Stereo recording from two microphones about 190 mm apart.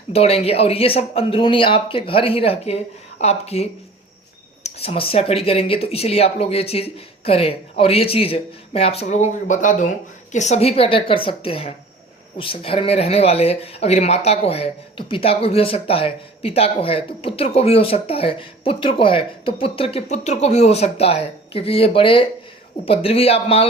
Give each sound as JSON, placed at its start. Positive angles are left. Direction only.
{"t": 0.1, "sound": "speech", "side_deg": 30}
{"t": 4.8, "sound": "a woman's voice", "side_deg": 30}